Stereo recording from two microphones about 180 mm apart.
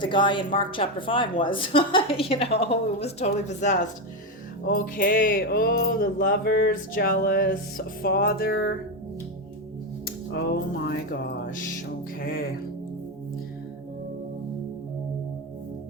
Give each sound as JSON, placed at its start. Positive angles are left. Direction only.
{"t": 0.0, "sound": "a woman's voice", "side_deg": 25}
{"t": 4.7, "sound": "music", "side_deg": 55}
{"t": 10.3, "sound": "music", "side_deg": 60}